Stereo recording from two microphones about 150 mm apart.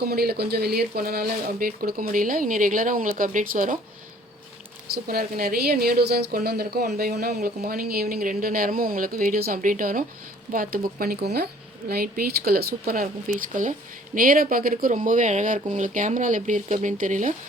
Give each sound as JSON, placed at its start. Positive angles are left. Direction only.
{"t": 0.0, "sound": "speech", "side_deg": -90}
{"t": 5.0, "sound": "a woman's voice", "side_deg": -85}
{"t": 10.5, "sound": "a woman's voice", "side_deg": -75}
{"t": 14.2, "sound": "speech", "side_deg": -70}